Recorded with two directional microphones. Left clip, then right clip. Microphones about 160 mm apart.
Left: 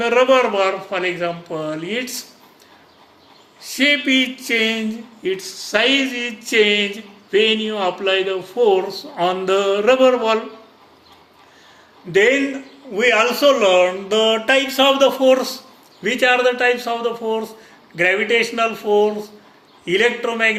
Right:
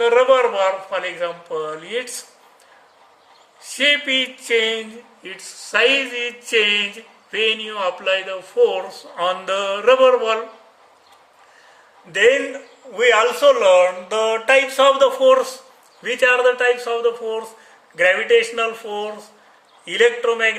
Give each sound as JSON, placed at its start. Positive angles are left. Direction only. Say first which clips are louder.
{"t": 0.0, "sound": "speech", "louder": "even", "side_deg": -70}
{"t": 3.8, "sound": "a sound", "louder": "left 1 dB", "side_deg": -80}
{"t": 5.2, "sound": "a man's voice", "louder": "left 11 dB", "side_deg": -60}
{"t": 12.1, "sound": "a man's voice", "louder": "even", "side_deg": -55}
{"t": 14.9, "sound": "a sound", "louder": "even", "side_deg": -90}
{"t": 16.0, "sound": "a man's voice", "louder": "even", "side_deg": -65}